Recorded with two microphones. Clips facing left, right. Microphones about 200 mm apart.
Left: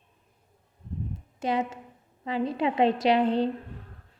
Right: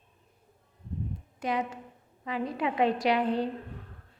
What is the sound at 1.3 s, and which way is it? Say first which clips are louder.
A woman's voice: left 3 dB; 25° left (ahead or behind).